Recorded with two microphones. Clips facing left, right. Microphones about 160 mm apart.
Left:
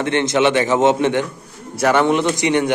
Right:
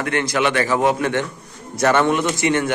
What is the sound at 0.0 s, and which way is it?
A man's voice, 25° left (ahead or behind).